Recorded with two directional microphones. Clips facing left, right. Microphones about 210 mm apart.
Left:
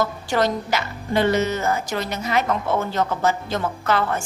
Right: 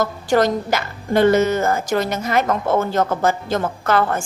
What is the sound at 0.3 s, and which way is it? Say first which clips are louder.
A woman's voice: right 6 dB; 45° right (ahead or behind).